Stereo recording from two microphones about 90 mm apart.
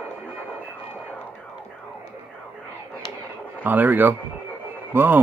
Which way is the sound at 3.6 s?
20° right (ahead or behind).